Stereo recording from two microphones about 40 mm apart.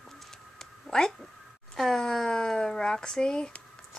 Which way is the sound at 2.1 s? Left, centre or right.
Centre.